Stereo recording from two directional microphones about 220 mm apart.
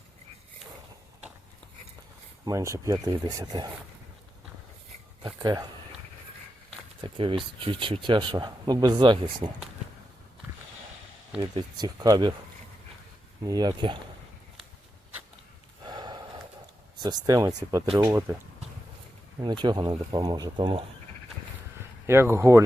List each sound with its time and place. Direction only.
2.4 s speech: 15° right (ahead or behind)
5.2 s speech: 15° right (ahead or behind)
7.0 s speech: 25° right (ahead or behind)
11.3 s speech: 20° right (ahead or behind)
13.4 s speech: 20° right (ahead or behind)
15.9 s a sound: 20° right (ahead or behind)
17.0 s speech: 15° right (ahead or behind)
19.4 s speech: 20° right (ahead or behind)
22.0 s speech: 10° right (ahead or behind)